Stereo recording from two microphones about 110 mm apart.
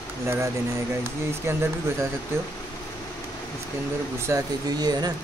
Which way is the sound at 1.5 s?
20° right (ahead or behind).